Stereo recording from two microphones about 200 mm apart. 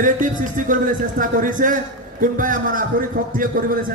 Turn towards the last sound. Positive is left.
turn(degrees=-45)  # may be behind; listen again after turning